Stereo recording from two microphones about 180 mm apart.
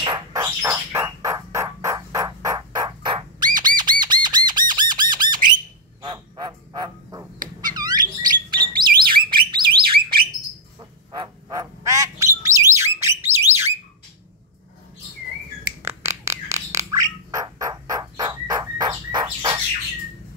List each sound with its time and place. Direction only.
0.0 s bird: 25° right (ahead or behind)
4.0 s squawk: 25° right (ahead or behind)
6.0 s frog: 20° right (ahead or behind)
7.7 s a sound: 20° right (ahead or behind)
8.7 s alarm: 55° right (ahead or behind)
9.3 s bird: 25° right (ahead or behind)
11.1 s bird: 20° right (ahead or behind)
15.8 s a sound: 15° right (ahead or behind)